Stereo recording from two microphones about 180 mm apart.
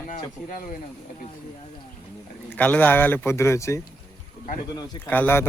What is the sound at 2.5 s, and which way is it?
Speech, 10° left (ahead or behind).